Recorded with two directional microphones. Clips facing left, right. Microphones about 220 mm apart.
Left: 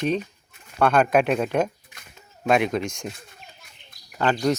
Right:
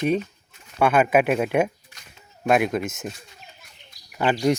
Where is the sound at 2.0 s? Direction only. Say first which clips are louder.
Left 2 dB; 55° left (ahead or behind).